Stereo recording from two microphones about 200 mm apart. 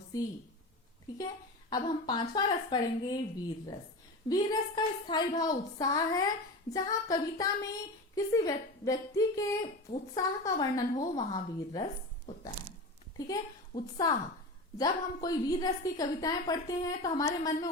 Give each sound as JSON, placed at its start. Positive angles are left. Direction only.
{"t": 1.7, "sound": "a woman's voice", "side_deg": 20}
{"t": 14.8, "sound": "a woman's voice", "side_deg": 20}